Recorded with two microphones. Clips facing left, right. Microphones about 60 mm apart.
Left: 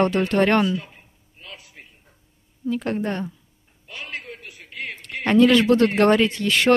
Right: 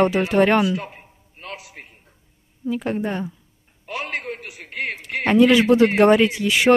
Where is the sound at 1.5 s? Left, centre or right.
Right.